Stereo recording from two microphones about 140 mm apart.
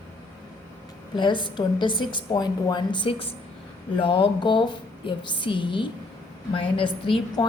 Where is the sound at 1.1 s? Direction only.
35° left (ahead or behind).